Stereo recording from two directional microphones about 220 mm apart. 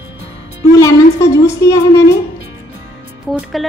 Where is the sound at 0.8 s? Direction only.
15° left (ahead or behind).